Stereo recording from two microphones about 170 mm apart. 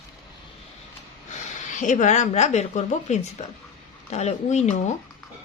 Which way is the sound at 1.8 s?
45° left (ahead or behind).